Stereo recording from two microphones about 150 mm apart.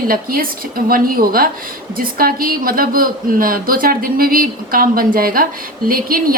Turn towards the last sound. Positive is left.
turn(degrees=-70)  # may be behind; listen again after turning